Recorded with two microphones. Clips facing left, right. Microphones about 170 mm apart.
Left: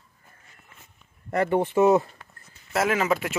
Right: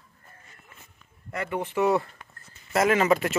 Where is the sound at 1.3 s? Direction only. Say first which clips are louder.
Left 8 dB; 45° left (ahead or behind).